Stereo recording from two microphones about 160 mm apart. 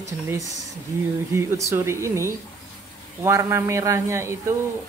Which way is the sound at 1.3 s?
15° right (ahead or behind).